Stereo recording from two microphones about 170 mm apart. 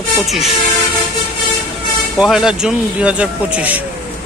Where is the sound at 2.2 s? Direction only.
5° right (ahead or behind).